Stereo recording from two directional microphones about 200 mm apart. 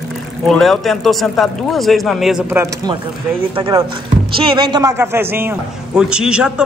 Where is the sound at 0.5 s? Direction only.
Centre (ahead or behind).